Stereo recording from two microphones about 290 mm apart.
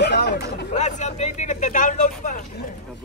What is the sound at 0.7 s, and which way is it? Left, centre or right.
Speech, left.